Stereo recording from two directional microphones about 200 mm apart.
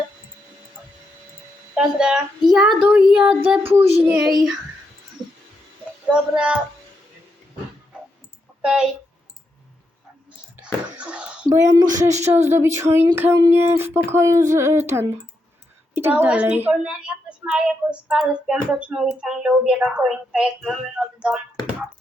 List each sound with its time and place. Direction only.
1.7 s a woman's voice: 5° right (ahead or behind)
6.1 s a woman's voice: 5° right (ahead or behind)
8.6 s a woman's voice: 5° right (ahead or behind)
10.9 s a sound: 5° right (ahead or behind)
11.4 s a woman's voice: 15° right (ahead or behind)